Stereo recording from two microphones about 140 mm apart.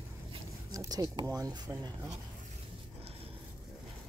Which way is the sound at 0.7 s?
25° right (ahead or behind).